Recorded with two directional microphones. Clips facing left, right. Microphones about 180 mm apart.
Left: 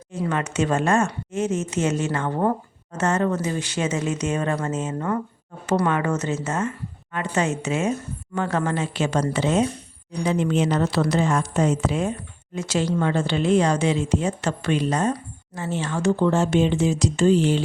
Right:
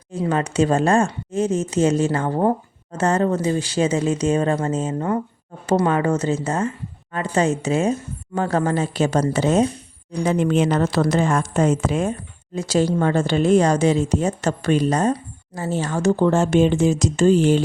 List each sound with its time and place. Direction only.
0.3 s a woman's voice: 35° right (ahead or behind)
10.2 s speech: 55° right (ahead or behind)
12.5 s a woman's voice: 35° right (ahead or behind)